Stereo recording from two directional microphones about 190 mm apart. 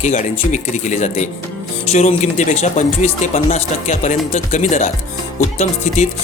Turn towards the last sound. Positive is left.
turn(degrees=35)  # may be behind; listen again after turning